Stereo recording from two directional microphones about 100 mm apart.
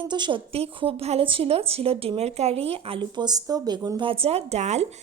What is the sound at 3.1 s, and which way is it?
Speech, 45° right (ahead or behind).